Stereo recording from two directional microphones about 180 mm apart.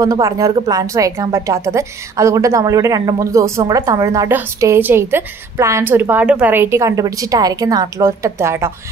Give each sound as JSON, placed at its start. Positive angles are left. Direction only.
{"t": 0.0, "sound": "a woman's voice", "side_deg": -20}